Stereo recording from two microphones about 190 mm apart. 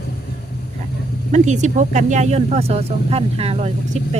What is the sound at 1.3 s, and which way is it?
Speech, 40° right (ahead or behind).